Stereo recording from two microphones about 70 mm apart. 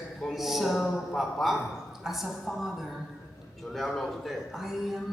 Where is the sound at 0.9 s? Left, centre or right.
Centre.